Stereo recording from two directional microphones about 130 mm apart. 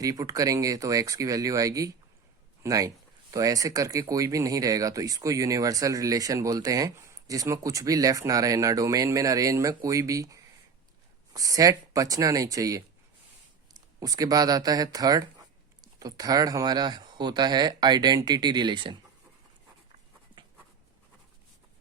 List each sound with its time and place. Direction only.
0.0 s speech: 25° right (ahead or behind)
14.0 s speech: 30° right (ahead or behind)